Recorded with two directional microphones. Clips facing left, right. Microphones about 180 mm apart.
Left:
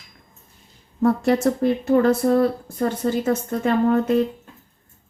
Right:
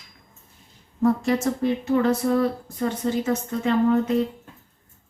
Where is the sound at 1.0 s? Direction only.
60° left (ahead or behind).